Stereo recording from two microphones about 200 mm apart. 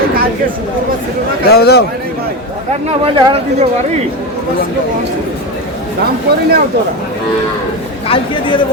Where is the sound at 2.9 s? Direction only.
30° right (ahead or behind).